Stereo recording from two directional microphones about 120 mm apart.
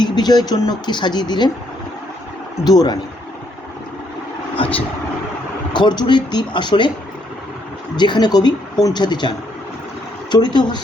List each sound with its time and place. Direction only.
0.0 s speech: 35° left (ahead or behind)
2.6 s speech: 35° left (ahead or behind)
4.5 s vehicle: 45° left (ahead or behind)
5.7 s speech: 35° left (ahead or behind)
7.9 s speech: 40° left (ahead or behind)
10.3 s speech: 35° left (ahead or behind)